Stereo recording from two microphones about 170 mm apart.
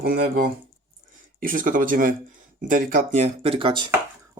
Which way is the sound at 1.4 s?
55° right (ahead or behind).